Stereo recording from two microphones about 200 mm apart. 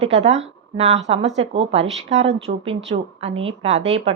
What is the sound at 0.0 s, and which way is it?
Speech, 35° right (ahead or behind).